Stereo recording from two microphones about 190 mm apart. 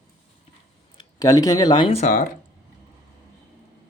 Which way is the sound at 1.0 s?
20° left (ahead or behind).